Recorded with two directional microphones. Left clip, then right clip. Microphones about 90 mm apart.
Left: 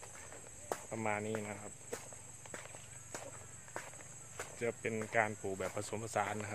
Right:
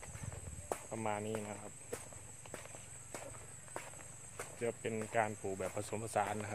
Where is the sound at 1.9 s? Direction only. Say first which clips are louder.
Left 1 dB; 10° right (ahead or behind).